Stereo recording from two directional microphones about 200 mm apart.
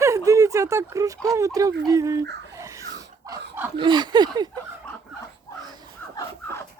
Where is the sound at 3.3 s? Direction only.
10° right (ahead or behind).